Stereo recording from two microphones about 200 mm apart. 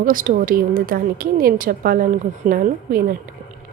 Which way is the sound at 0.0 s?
45° right (ahead or behind).